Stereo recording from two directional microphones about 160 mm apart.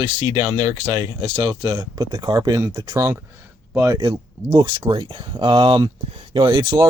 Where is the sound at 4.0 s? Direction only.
30° right (ahead or behind).